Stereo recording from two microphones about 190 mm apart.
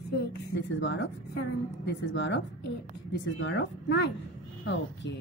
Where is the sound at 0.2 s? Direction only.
60° left (ahead or behind).